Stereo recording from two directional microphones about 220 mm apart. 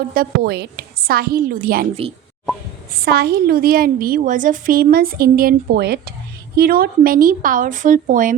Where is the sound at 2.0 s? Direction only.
25° right (ahead or behind).